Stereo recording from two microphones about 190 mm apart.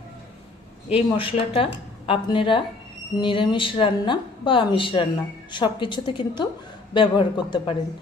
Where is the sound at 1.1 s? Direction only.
30° left (ahead or behind).